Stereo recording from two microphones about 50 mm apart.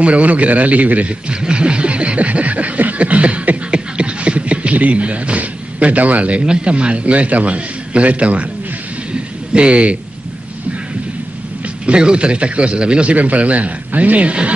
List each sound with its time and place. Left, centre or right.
0.0 s speech: right
1.3 s a sound: centre
9.1 s rain: right
11.8 s speech: centre